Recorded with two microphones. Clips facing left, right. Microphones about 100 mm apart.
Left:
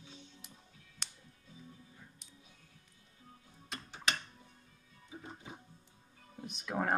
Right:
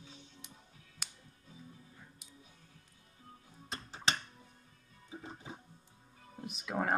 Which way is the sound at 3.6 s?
30° right (ahead or behind).